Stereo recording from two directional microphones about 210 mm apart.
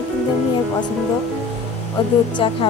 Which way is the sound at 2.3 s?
25° left (ahead or behind).